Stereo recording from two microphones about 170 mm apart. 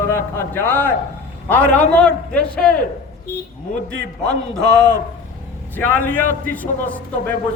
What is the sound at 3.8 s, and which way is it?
Speech, 80° right.